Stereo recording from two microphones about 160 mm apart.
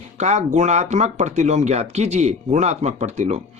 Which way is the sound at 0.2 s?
45° right (ahead or behind).